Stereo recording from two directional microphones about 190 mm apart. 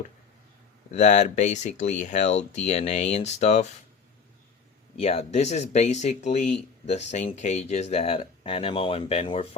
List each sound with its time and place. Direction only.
0.9 s speech: 40° left (ahead or behind)
4.9 s speech: 35° left (ahead or behind)